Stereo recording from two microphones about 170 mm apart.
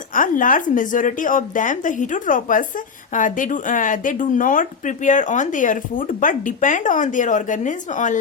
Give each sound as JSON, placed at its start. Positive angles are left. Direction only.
{"t": 0.1, "sound": "speech", "side_deg": 50}